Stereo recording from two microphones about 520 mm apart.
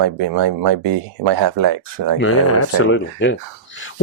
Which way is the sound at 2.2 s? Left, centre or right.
Left.